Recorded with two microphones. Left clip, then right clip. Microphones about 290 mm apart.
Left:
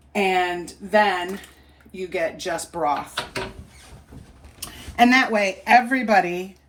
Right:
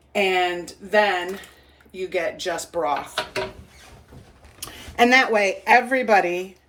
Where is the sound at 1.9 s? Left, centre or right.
Centre.